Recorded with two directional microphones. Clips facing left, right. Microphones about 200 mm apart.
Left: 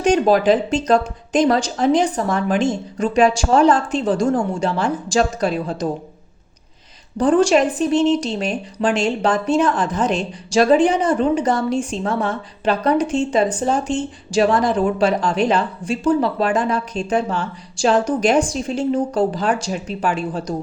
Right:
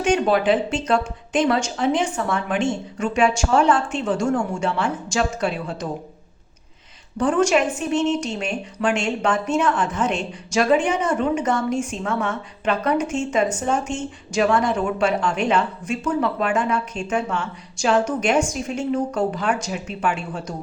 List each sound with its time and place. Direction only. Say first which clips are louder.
0.0 s speech: left 4 dB; 40° left (ahead or behind)
7.2 s speech: left 4 dB; 35° left (ahead or behind)